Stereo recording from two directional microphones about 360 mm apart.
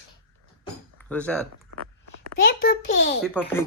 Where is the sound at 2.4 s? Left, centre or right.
Left.